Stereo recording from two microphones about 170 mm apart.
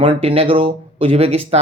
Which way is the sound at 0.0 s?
30° right (ahead or behind).